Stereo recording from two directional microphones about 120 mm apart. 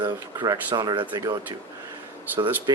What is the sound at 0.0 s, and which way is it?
Speech, 35° right (ahead or behind).